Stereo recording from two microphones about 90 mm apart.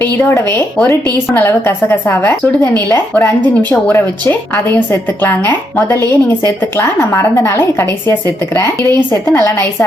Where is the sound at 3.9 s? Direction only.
20° left (ahead or behind).